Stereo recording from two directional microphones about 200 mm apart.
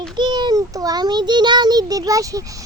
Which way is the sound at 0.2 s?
20° right (ahead or behind).